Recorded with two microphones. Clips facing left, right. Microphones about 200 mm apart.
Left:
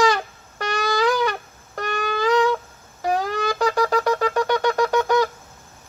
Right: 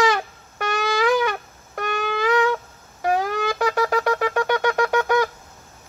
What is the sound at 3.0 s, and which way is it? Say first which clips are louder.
Shofar: right 1 dB; 5° right (ahead or behind).